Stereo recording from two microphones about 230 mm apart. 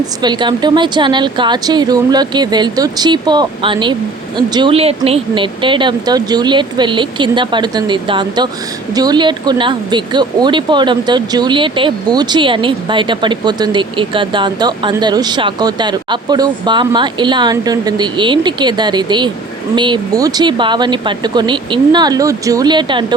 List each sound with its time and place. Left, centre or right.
0.2 s speech: centre